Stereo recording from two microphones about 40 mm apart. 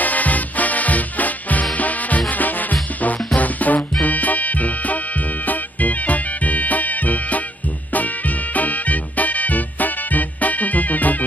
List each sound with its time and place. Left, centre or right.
0.0 s music: left